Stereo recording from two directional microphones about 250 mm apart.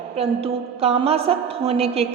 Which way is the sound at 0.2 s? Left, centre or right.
Right.